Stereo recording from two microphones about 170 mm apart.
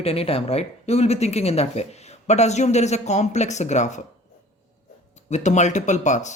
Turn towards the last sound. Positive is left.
turn(degrees=45)  # may be behind; listen again after turning